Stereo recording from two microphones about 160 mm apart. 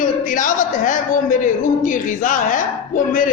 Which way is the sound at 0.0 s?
55° left (ahead or behind).